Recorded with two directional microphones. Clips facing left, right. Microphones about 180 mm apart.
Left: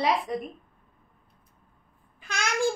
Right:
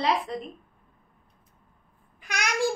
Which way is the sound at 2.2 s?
15° right (ahead or behind).